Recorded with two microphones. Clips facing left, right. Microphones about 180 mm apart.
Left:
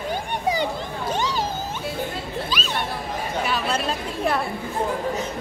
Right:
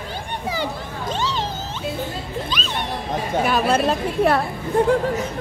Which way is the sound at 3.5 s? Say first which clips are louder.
Right 8 dB; 50° right (ahead or behind).